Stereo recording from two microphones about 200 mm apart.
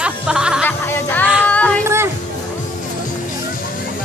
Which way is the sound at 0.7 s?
10° left (ahead or behind).